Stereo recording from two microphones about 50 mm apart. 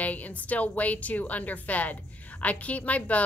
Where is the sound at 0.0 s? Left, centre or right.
Left.